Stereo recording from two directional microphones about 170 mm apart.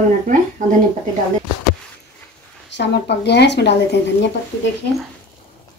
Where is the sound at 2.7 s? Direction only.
85° left.